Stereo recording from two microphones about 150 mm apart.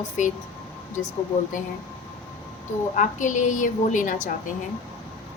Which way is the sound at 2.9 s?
55° left (ahead or behind).